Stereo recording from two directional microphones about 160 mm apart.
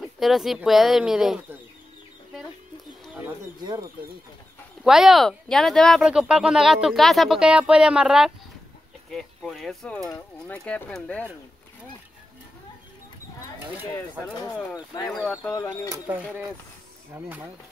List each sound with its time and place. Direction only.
0.0 s speech: centre (ahead or behind)
3.6 s speech: 25° right (ahead or behind)
4.8 s speech: centre (ahead or behind)
15.1 s speech: 5° left (ahead or behind)
15.5 s speech: 20° left (ahead or behind)
17.1 s speech: 15° right (ahead or behind)